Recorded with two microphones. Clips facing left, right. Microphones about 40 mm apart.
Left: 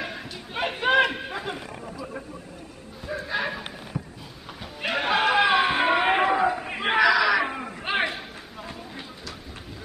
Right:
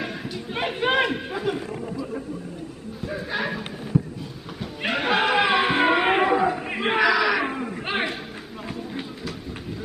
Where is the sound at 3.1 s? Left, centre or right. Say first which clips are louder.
Even; centre.